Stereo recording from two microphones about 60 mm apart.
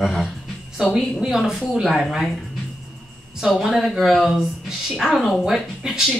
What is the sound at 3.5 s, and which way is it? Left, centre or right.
Speech, centre.